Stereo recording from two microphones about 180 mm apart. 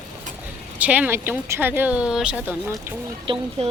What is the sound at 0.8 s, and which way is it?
Speech, 10° right (ahead or behind).